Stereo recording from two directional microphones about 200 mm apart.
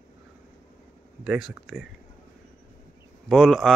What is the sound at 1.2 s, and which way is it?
Speech, 5° right (ahead or behind).